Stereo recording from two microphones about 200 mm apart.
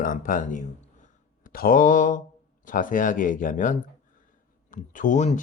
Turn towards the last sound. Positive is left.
turn(degrees=35)  # may be behind; listen again after turning